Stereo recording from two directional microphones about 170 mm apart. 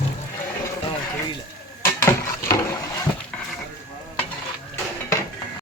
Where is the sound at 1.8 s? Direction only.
15° left (ahead or behind).